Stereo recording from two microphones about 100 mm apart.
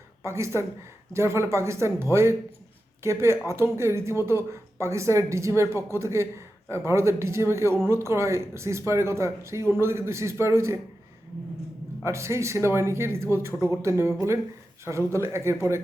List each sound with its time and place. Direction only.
0.2 s speech: 30° right (ahead or behind)
12.0 s speech: 30° right (ahead or behind)